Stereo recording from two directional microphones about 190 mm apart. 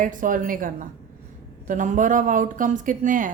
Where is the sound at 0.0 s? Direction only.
45° right (ahead or behind).